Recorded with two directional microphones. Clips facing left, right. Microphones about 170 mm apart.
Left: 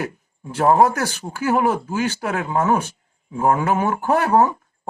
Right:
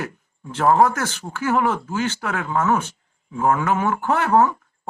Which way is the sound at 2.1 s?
35° left (ahead or behind).